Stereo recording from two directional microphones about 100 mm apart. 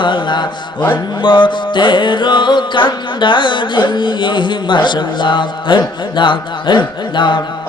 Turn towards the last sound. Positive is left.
turn(degrees=50)  # may be behind; listen again after turning